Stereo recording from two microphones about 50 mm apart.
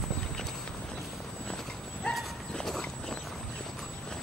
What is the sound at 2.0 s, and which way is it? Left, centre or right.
Dog, left.